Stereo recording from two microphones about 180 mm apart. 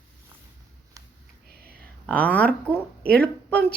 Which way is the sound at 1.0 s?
20° right (ahead or behind).